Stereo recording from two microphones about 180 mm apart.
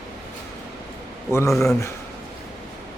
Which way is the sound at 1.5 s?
Centre (ahead or behind).